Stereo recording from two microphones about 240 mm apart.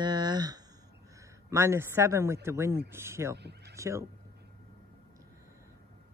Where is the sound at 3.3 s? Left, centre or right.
Right.